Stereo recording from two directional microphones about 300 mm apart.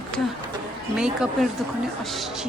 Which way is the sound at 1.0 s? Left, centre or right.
Centre.